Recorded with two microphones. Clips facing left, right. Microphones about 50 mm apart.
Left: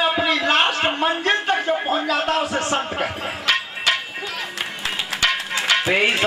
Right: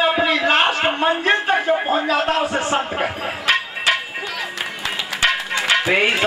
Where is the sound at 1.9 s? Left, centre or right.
Right.